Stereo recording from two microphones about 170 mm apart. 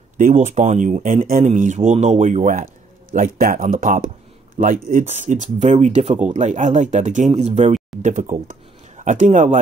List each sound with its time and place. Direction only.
0.2 s speech: 50° right (ahead or behind)